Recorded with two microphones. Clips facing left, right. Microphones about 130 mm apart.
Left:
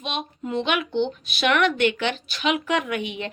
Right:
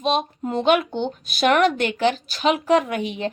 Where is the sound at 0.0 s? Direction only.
40° right (ahead or behind).